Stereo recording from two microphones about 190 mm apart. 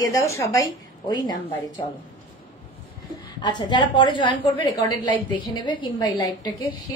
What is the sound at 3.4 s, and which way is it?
A woman's voice, 25° left (ahead or behind).